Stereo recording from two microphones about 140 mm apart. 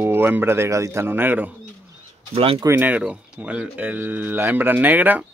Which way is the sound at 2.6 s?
15° right (ahead or behind).